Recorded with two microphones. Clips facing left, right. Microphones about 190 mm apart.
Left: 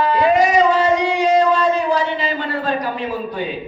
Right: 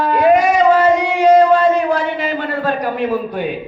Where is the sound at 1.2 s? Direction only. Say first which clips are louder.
Right 7 dB; 55° right (ahead or behind).